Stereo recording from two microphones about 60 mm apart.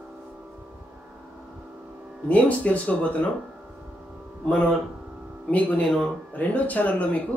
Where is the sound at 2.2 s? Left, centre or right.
Left.